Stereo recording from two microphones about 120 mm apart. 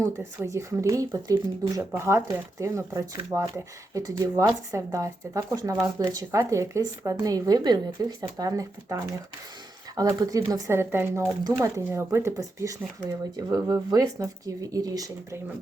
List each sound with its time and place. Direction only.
0.0 s speech: 25° right (ahead or behind)